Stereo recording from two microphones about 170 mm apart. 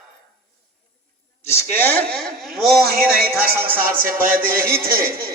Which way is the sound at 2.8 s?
60° right (ahead or behind).